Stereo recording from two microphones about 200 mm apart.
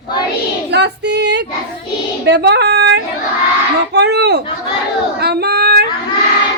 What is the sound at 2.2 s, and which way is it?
Speech, 55° right (ahead or behind).